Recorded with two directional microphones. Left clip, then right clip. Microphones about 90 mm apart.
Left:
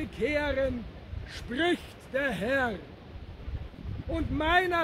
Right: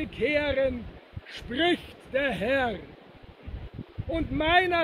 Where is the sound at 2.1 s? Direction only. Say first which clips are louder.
Right 3 dB; 20° right (ahead or behind).